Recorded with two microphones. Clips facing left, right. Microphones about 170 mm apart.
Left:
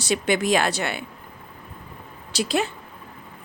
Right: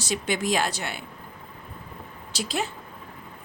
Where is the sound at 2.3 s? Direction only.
65° left (ahead or behind).